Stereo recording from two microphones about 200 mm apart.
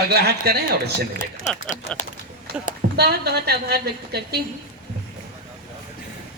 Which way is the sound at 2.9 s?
55° right (ahead or behind).